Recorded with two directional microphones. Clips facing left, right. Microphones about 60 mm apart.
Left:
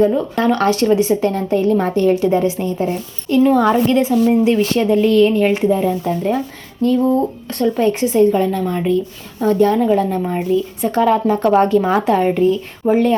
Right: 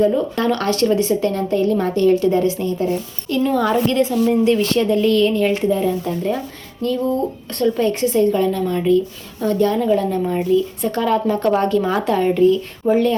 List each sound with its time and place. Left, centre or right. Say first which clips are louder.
0.4 s a woman's voice: left 5 dB; centre